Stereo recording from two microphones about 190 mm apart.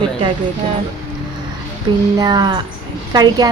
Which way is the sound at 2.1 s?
20° right (ahead or behind).